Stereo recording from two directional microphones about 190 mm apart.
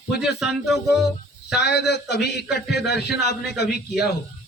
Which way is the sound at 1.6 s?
60° left (ahead or behind).